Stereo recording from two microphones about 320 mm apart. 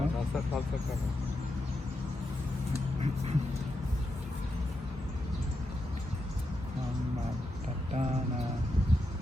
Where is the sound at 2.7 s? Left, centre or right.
Centre.